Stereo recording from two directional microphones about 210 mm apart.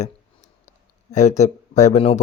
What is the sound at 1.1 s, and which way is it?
Speech, 35° left (ahead or behind).